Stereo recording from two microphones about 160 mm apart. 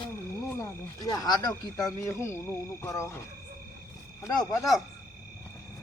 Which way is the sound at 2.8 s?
15° left (ahead or behind).